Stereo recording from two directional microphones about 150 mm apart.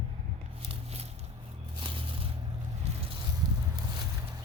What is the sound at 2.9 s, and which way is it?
Vehicle, 45° right (ahead or behind).